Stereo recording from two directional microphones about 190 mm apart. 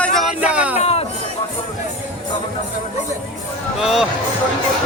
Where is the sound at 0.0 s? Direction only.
Centre (ahead or behind).